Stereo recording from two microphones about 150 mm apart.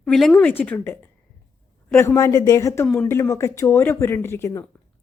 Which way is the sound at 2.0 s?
20° left (ahead or behind).